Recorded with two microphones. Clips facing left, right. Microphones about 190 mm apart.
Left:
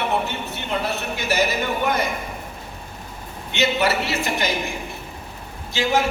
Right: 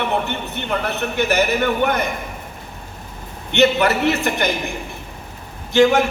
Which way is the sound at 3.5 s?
55° right (ahead or behind).